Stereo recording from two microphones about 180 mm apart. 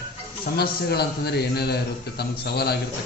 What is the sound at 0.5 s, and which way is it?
A man's voice, 60° left (ahead or behind).